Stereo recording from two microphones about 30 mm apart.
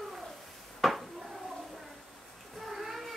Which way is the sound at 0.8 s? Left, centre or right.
Centre.